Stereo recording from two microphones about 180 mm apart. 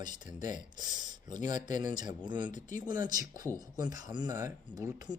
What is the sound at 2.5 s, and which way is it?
Speech, 45° left (ahead or behind).